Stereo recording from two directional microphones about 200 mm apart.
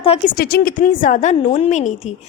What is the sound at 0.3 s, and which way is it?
A woman's voice, 50° left (ahead or behind).